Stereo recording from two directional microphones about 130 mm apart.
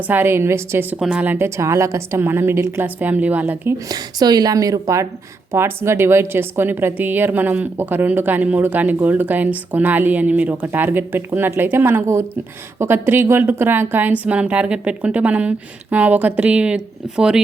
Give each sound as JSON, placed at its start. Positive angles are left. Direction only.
{"t": 0.1, "sound": "a woman's voice", "side_deg": -15}
{"t": 0.9, "sound": "a woman's voice", "side_deg": -5}
{"t": 3.8, "sound": "a woman's voice", "side_deg": -30}